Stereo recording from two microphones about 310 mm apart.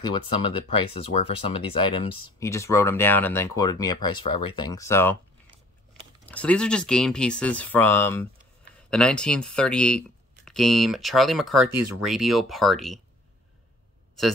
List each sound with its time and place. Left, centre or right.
0.4 s speech: centre
6.2 s speech: centre